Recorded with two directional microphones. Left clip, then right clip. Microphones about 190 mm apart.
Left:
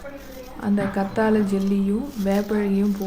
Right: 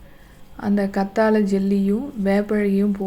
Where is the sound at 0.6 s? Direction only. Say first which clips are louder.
Right 2 dB; 15° right (ahead or behind).